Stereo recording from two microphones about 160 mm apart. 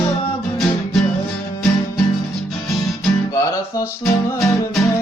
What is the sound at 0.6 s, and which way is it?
Music, centre (ahead or behind).